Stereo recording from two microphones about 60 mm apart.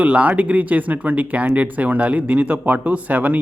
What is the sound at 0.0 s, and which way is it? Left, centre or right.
Speech, right.